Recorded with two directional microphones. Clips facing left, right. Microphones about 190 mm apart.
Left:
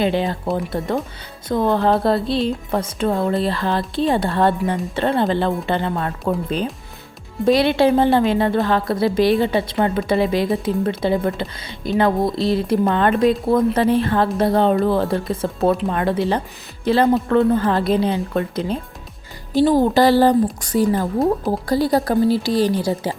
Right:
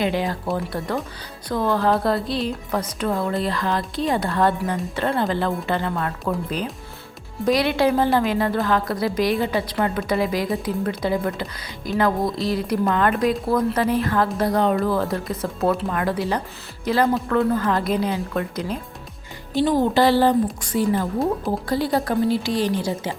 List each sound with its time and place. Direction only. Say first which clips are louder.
0.0 s speech: left 3 dB; 25° left (ahead or behind)
7.4 s a woman's voice: left 4 dB; 25° left (ahead or behind)